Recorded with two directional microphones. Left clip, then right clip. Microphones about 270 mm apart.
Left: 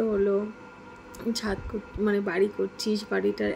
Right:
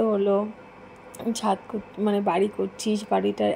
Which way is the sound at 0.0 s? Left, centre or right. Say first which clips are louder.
Right 3 dB; centre.